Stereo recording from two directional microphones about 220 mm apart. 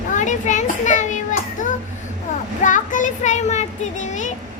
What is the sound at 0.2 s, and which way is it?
Child singing, 35° left (ahead or behind).